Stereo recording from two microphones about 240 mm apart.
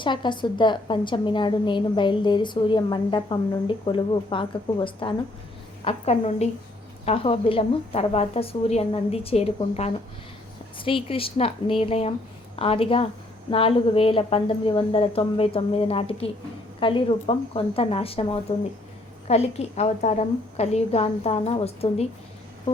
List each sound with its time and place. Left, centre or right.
0.0 s a woman's voice: centre